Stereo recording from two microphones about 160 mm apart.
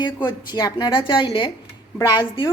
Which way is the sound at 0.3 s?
25° left (ahead or behind).